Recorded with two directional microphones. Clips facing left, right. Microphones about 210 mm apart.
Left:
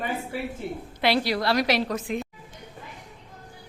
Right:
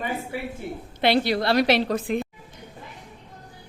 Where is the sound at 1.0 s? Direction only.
25° right (ahead or behind).